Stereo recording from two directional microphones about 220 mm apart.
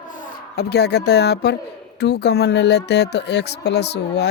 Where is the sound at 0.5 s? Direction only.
45° left (ahead or behind).